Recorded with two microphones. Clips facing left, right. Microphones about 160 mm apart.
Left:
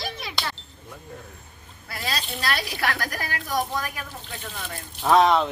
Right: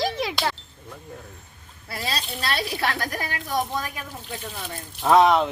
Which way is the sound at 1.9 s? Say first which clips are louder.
Right 1 dB; 30° right (ahead or behind).